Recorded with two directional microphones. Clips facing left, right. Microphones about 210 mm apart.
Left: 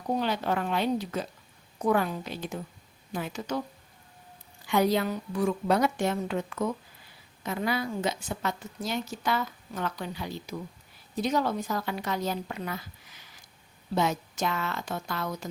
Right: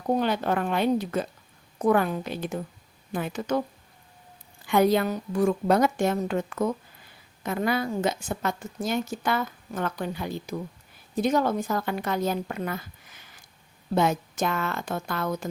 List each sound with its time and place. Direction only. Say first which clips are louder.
0.2 s a woman's voice: right 3 dB; 50° right (ahead or behind)
4.7 s a woman's voice: right 4 dB; 55° right (ahead or behind)